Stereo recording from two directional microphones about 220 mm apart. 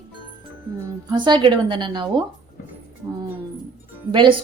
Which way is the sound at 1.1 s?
20° right (ahead or behind).